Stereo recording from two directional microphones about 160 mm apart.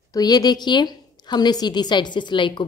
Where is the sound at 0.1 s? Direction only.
25° left (ahead or behind).